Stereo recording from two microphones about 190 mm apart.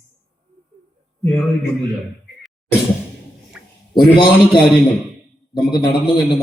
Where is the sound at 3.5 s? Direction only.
5° right (ahead or behind).